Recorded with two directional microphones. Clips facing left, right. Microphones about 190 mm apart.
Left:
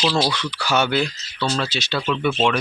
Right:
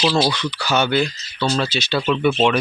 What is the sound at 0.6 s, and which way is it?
Speech, 10° left (ahead or behind).